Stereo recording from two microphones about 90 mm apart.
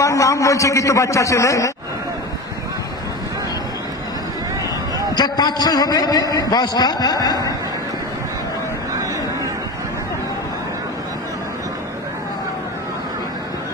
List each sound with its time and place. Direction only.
0.0 s a man's voice: 35° left (ahead or behind)
5.1 s a man's voice: 50° left (ahead or behind)